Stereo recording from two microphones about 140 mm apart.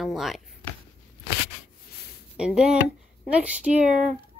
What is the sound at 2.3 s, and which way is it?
Speech, 5° right (ahead or behind).